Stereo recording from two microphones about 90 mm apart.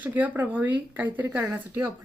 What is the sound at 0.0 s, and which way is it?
Speech, 20° right (ahead or behind).